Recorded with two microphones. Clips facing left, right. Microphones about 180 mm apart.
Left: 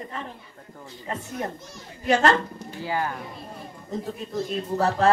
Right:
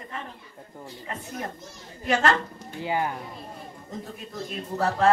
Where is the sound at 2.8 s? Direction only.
20° right (ahead or behind).